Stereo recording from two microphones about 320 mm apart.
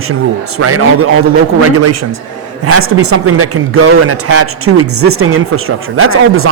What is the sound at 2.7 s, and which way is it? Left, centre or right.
A man's voice, right.